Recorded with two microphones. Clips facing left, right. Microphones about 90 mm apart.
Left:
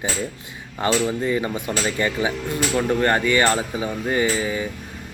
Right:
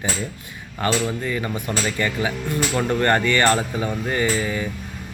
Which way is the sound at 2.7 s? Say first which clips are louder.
Even; 5° left (ahead or behind).